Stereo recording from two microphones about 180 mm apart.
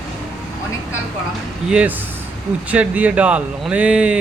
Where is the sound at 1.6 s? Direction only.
5° right (ahead or behind).